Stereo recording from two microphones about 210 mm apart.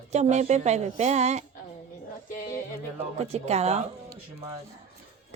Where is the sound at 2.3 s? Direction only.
40° left (ahead or behind).